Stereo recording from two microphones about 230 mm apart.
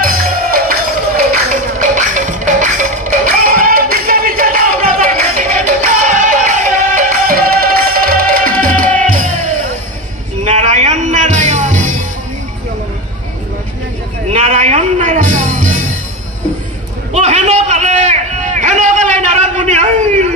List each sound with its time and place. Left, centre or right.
0.0 s music: right
14.3 s music: right
17.1 s a sound: right